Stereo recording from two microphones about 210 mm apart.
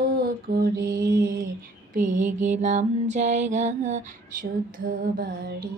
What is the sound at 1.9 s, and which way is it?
Mantra, 40° right (ahead or behind).